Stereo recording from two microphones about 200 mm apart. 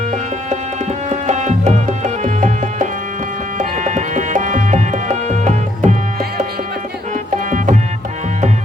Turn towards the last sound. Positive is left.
turn(degrees=-40)  # may be behind; listen again after turning